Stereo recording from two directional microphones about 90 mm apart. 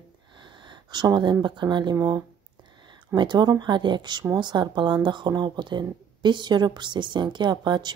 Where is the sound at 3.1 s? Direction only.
55° right (ahead or behind).